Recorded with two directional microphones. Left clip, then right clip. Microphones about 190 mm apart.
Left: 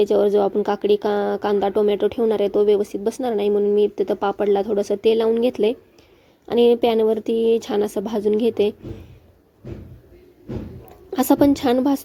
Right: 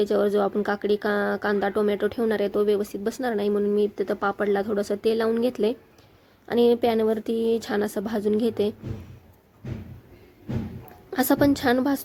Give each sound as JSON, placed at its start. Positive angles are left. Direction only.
{"t": 0.0, "sound": "a woman's voice", "side_deg": 0}
{"t": 11.1, "sound": "a woman's voice", "side_deg": 0}